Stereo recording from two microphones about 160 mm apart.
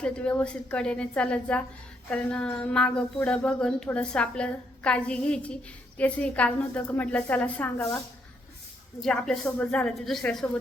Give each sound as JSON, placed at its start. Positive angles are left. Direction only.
{"t": 0.0, "sound": "a woman's voice", "side_deg": 10}
{"t": 9.0, "sound": "a woman's voice", "side_deg": 5}